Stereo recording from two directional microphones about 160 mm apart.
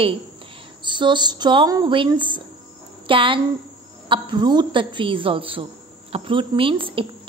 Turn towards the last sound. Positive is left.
turn(degrees=-35)  # may be behind; listen again after turning